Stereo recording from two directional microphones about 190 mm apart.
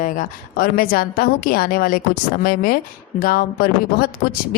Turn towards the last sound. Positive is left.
turn(degrees=50)  # may be behind; listen again after turning